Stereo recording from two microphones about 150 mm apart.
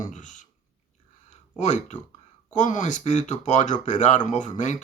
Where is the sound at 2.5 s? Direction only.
55° left (ahead or behind).